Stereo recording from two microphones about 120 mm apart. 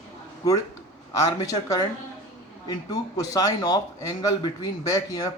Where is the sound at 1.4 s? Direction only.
30° left (ahead or behind).